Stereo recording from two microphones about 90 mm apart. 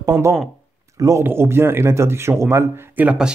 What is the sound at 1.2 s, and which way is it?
Speech, 25° right (ahead or behind).